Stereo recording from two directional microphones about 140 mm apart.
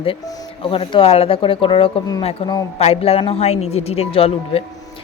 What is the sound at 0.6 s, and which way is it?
A woman's voice, 40° left (ahead or behind).